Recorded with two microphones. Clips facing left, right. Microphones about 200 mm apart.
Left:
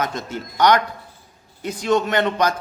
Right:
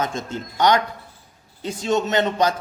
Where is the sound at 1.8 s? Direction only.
25° right (ahead or behind).